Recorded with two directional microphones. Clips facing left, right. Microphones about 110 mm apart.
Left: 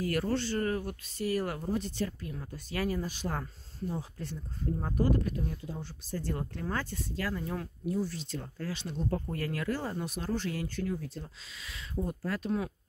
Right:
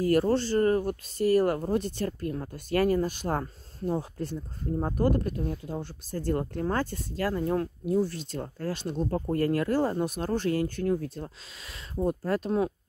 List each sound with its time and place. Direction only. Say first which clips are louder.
0.0 s speech: right 7 dB; 35° right (ahead or behind); by 11.2 s 50° right (ahead or behind)
12.1 s speech: right 6 dB; 40° right (ahead or behind)